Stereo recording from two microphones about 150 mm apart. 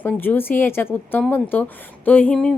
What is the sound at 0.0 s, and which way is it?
A woman's voice, 15° left (ahead or behind).